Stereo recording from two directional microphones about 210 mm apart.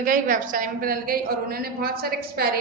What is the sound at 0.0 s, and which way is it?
A woman's voice, 40° right (ahead or behind).